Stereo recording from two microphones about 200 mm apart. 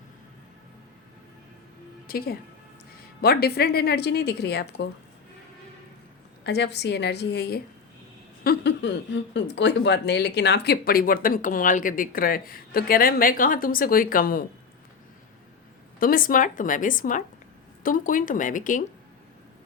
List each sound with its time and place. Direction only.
2.0 s speech: 50° left (ahead or behind)
6.4 s a woman's voice: 60° left (ahead or behind)
16.0 s a woman's voice: 45° left (ahead or behind)